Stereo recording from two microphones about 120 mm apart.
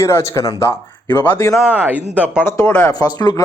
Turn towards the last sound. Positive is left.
turn(degrees=35)  # may be behind; listen again after turning